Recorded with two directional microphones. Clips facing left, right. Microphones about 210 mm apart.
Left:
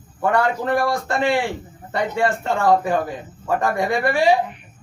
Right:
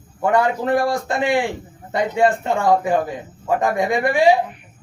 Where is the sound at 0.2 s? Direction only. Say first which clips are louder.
Right 2 dB; 20° right (ahead or behind).